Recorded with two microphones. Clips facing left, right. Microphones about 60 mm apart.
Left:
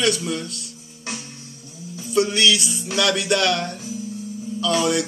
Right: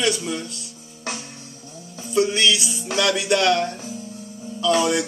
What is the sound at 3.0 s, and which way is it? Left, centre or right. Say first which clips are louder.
A man's voice: even; centre.